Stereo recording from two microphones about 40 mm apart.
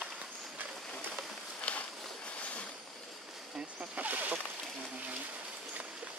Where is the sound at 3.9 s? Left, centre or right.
Right.